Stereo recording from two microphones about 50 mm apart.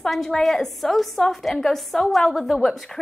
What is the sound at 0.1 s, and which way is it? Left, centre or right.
A woman's voice, centre.